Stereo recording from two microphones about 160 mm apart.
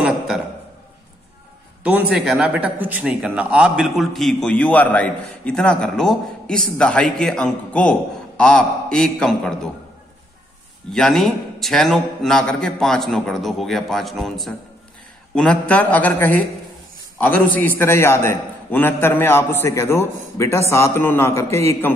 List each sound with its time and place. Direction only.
1.8 s a man's voice: 10° right (ahead or behind)
10.9 s a man's voice: centre (ahead or behind); by 21.9 s 15° left (ahead or behind)